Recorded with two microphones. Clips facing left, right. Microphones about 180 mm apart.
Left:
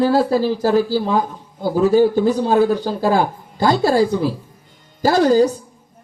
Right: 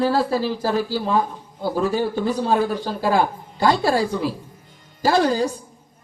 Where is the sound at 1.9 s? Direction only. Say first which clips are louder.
Left 8 dB; 40° left (ahead or behind).